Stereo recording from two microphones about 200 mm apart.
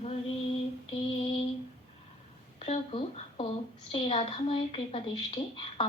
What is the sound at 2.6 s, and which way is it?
A woman's voice, 30° left (ahead or behind).